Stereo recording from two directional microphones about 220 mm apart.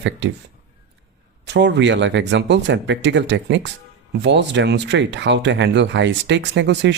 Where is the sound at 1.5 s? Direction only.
50° right (ahead or behind).